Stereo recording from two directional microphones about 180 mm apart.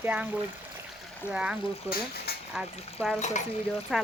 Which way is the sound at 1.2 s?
5° right (ahead or behind).